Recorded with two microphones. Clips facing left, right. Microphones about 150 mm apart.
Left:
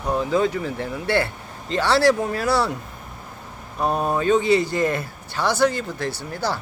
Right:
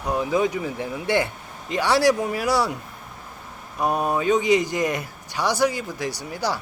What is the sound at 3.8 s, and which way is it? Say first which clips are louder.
Speech: left 1 dB; 10° right (ahead or behind).